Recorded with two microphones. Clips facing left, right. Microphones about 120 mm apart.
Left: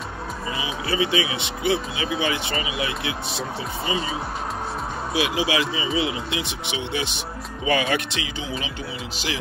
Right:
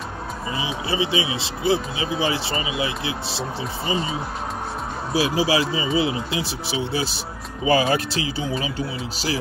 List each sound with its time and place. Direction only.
0.6 s speech: 30° right (ahead or behind)
5.1 s speech: 35° right (ahead or behind)